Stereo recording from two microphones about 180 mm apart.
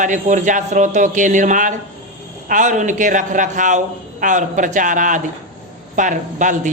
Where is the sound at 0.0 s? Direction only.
45° right (ahead or behind).